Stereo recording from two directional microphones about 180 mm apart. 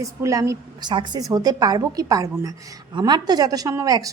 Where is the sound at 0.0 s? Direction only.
20° right (ahead or behind).